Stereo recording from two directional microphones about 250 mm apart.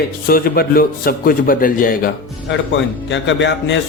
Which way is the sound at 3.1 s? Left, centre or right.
Left.